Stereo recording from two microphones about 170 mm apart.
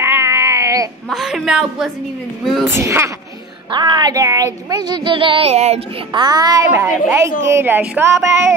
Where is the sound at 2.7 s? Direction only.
15° right (ahead or behind).